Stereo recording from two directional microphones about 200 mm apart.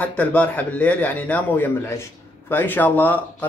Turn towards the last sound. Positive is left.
turn(degrees=10)  # may be behind; listen again after turning